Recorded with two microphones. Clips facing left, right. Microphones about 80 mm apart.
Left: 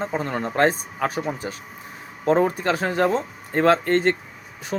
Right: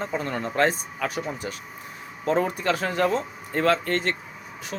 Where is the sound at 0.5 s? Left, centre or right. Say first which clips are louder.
Left 3 dB; left.